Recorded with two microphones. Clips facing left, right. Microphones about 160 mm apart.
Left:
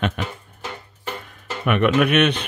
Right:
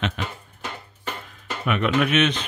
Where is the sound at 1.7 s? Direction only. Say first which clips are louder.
Left 4 dB; 60° left (ahead or behind).